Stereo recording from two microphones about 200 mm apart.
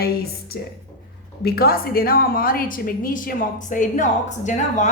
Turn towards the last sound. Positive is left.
turn(degrees=35)  # may be behind; listen again after turning